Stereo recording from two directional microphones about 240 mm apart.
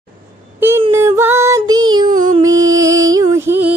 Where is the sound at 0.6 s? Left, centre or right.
Centre.